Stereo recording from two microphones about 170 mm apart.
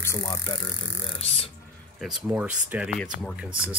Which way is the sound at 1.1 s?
35° left (ahead or behind).